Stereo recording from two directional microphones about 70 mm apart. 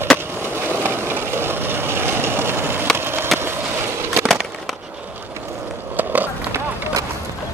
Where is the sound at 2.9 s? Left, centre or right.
Right.